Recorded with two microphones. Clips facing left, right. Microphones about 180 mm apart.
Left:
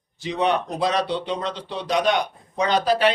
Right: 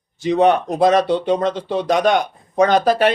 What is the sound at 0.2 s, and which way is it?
A man's voice, 45° right (ahead or behind).